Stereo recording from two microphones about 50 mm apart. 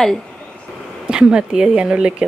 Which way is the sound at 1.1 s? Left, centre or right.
Centre.